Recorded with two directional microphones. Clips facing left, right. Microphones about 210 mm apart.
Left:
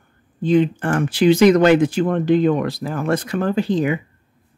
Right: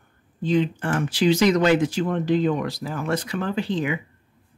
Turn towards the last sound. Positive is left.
turn(degrees=40)  # may be behind; listen again after turning